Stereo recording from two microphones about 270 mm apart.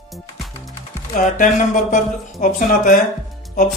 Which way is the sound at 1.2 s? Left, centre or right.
Left.